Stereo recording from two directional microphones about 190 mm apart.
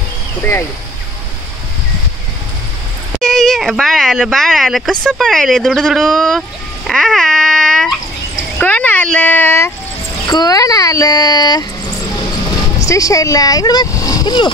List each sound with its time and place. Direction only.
0.4 s speech: 10° left (ahead or behind)
3.2 s speech: centre (ahead or behind)
6.9 s babbling: centre (ahead or behind)
8.5 s a sound: 10° left (ahead or behind)
10.2 s speech: 20° left (ahead or behind)
12.7 s speech: 15° left (ahead or behind)